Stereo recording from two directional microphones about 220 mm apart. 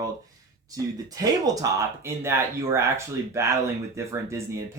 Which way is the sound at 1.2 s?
15° right (ahead or behind).